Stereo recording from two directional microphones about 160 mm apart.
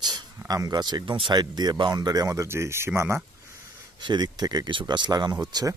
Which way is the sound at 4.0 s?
30° right (ahead or behind).